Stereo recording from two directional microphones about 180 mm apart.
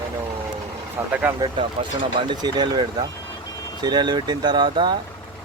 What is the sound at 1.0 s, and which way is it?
Speech, 10° right (ahead or behind).